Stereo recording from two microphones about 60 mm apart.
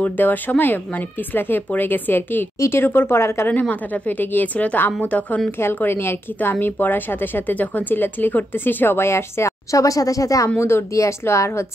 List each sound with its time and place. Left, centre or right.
0.0 s a woman's voice: left
3.6 s a woman's voice: left
5.9 s a woman's voice: left
10.6 s speech: left
10.9 s speech: left